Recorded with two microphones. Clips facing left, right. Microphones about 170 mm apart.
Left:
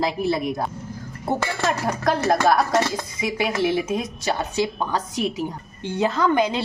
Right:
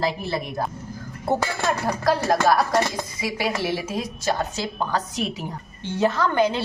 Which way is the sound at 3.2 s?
20° left (ahead or behind).